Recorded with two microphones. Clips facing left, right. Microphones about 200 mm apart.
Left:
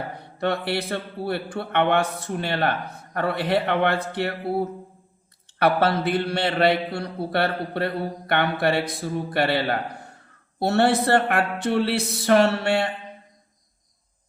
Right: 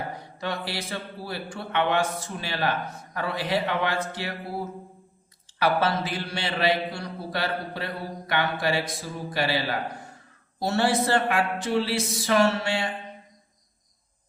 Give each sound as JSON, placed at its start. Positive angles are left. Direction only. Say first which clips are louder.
{"t": 0.2, "sound": "speech", "louder": "left 6 dB", "side_deg": 60}
{"t": 5.5, "sound": "speech", "louder": "left 3 dB", "side_deg": 60}